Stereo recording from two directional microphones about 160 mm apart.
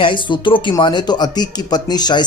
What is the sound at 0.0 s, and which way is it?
A man's voice, 30° left (ahead or behind).